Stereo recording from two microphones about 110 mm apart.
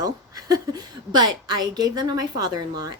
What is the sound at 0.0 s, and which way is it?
A woman's voice, 35° right (ahead or behind).